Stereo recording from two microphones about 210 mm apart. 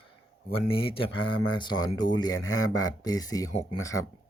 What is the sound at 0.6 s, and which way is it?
Speech, 25° left (ahead or behind).